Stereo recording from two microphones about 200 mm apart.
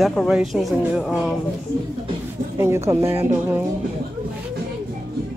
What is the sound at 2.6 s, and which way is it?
Speech, 15° right (ahead or behind).